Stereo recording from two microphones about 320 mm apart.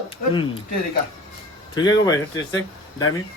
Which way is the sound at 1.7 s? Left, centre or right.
Centre.